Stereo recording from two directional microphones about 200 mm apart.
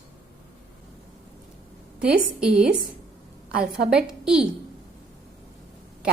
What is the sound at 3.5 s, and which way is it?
Speech, 50° right (ahead or behind).